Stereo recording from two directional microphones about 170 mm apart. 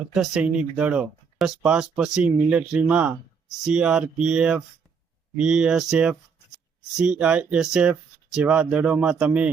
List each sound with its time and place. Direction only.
0.1 s speech: 5° right (ahead or behind)